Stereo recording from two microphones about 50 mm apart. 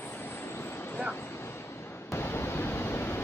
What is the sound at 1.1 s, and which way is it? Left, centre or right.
Waves, left.